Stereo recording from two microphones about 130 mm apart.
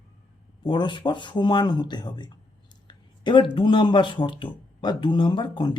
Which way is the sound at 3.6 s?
40° left (ahead or behind).